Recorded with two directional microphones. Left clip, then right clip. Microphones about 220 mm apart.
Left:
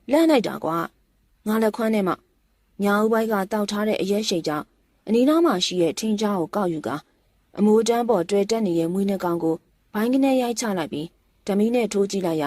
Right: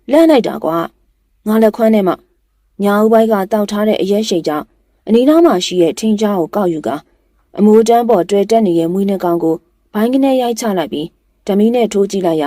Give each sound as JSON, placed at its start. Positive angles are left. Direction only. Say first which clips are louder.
{"t": 0.0, "sound": "speech", "louder": "right 9 dB", "side_deg": 30}